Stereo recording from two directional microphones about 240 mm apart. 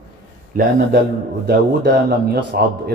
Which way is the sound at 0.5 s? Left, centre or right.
Right.